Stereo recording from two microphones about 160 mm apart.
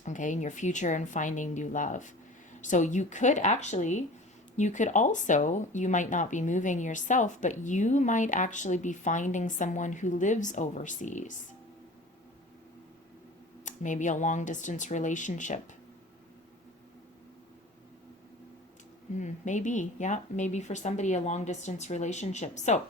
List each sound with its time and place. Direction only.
0.0 s speech: 50° left (ahead or behind)
13.7 s speech: 50° left (ahead or behind)
19.1 s speech: 50° left (ahead or behind)